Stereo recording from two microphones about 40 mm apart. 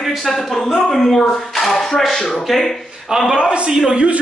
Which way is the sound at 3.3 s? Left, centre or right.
Right.